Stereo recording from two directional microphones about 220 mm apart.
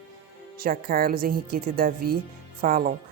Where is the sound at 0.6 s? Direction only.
40° right (ahead or behind).